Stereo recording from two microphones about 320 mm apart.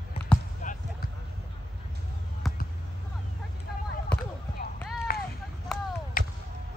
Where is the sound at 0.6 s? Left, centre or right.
Left.